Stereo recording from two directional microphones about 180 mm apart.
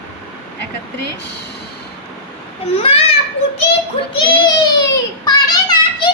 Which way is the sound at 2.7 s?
30° left (ahead or behind).